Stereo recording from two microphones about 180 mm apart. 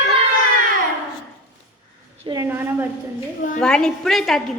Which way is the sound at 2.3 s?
15° right (ahead or behind).